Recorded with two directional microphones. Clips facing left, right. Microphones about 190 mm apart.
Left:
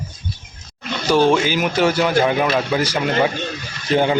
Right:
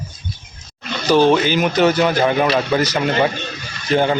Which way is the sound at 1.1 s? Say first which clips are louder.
Right 2 dB; 10° left (ahead or behind).